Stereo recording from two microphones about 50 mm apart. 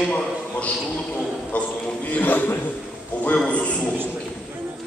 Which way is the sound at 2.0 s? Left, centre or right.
Left.